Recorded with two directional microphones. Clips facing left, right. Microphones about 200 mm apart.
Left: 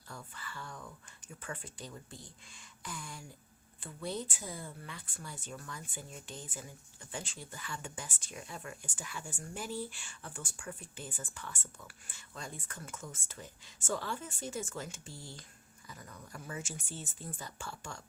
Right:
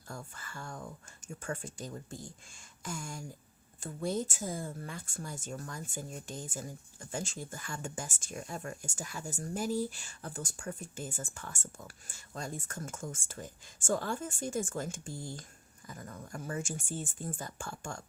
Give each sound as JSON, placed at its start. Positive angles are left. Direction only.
{"t": 0.1, "sound": "speech", "side_deg": -45}